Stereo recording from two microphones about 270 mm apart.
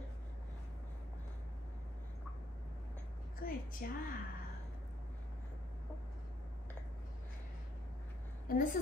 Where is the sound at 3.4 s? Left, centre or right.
Left.